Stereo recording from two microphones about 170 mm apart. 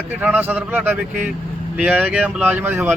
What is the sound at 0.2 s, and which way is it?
Speech, 10° right (ahead or behind).